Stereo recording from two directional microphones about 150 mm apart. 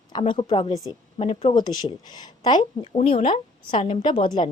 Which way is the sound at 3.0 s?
40° left (ahead or behind).